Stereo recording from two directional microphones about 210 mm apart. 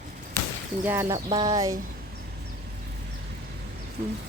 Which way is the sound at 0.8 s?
10° right (ahead or behind).